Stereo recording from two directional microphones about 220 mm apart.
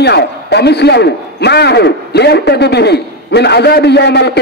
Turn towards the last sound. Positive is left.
turn(degrees=50)  # may be behind; listen again after turning